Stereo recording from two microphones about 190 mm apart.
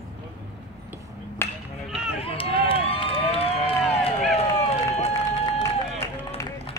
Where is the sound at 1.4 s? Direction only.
15° left (ahead or behind).